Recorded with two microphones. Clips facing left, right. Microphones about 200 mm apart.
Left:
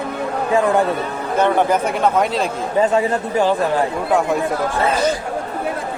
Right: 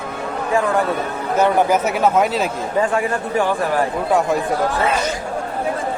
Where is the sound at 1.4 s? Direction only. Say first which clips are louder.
Even; 10° right (ahead or behind).